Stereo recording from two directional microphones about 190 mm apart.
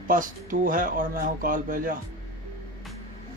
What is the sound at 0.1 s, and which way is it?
A man's voice, 45° right (ahead or behind).